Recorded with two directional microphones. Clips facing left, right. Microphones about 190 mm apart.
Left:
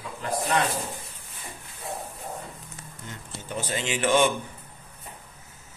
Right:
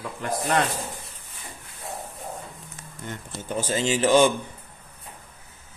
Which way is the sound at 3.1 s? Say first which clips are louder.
Right 5 dB; 45° right (ahead or behind).